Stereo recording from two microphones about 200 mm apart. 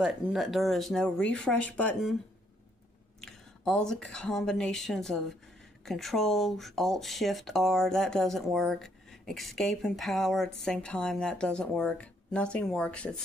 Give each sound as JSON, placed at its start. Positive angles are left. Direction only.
{"t": 0.0, "sound": "speech", "side_deg": -5}
{"t": 3.2, "sound": "speech", "side_deg": 5}